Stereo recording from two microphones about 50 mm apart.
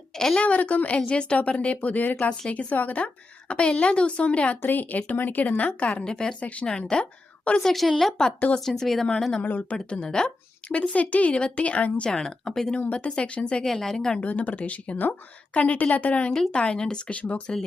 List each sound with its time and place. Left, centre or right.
0.3 s a woman's voice: left
4.6 s speech: left; by 6.3 s centre
6.4 s a woman's voice: left
6.7 s a woman's voice: centre
7.6 s a woman's voice: centre
9.4 s speech: left
9.7 s a woman's voice: centre
12.9 s a woman's voice: left
13.7 s a woman's voice: centre
14.2 s a woman's voice: left